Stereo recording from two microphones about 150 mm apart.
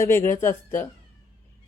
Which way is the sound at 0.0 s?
20° left (ahead or behind).